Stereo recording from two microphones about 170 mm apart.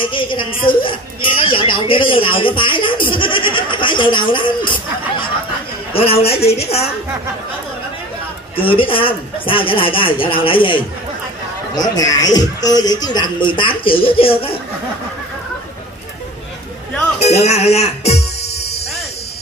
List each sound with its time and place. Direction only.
0.0 s speech: 30° left (ahead or behind)
8.5 s speech: 30° left (ahead or behind)
17.2 s speech: 40° left (ahead or behind)